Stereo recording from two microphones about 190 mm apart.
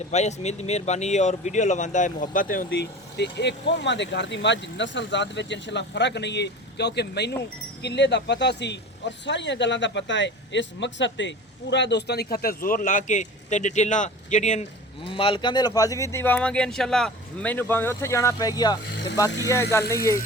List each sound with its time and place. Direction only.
0.1 s speech: 35° left (ahead or behind)
2.6 s speech: 60° left (ahead or behind); by 14.7 s 40° left (ahead or behind)
15.1 s speech: 25° left (ahead or behind)